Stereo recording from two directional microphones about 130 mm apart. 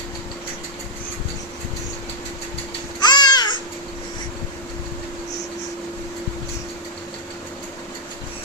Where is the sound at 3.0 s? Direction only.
35° left (ahead or behind).